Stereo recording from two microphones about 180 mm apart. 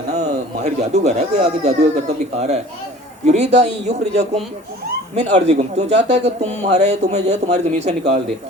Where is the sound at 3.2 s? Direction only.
40° right (ahead or behind).